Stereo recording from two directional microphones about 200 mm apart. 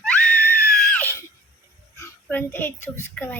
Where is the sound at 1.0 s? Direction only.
15° left (ahead or behind).